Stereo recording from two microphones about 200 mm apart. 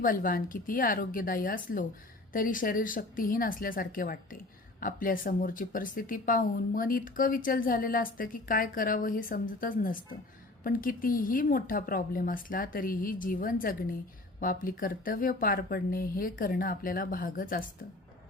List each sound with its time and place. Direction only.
0.0 s speech: 45° left (ahead or behind)